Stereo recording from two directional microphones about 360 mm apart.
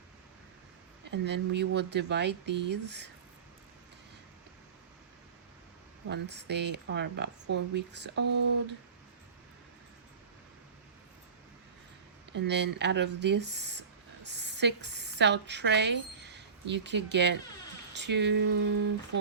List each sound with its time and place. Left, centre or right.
1.1 s speech: right
6.1 s speech: right
12.3 s a woman's voice: right